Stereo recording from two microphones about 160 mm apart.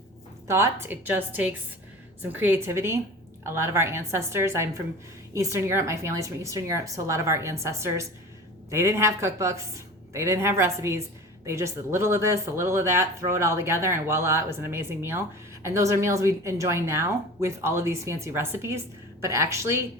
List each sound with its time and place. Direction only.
0.4 s speech: 15° right (ahead or behind)